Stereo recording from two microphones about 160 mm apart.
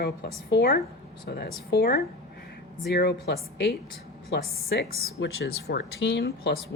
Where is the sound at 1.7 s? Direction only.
90° left.